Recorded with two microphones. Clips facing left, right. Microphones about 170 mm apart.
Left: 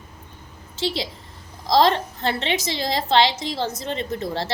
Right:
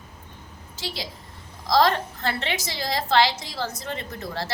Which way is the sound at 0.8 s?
25° left (ahead or behind).